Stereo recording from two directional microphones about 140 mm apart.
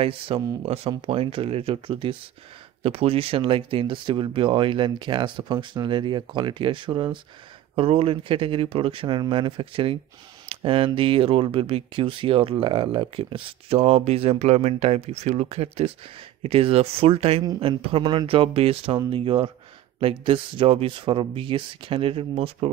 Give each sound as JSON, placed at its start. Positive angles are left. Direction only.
{"t": 0.0, "sound": "speech", "side_deg": -40}